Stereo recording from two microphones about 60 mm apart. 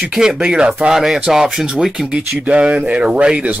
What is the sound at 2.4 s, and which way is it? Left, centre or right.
Speech, right.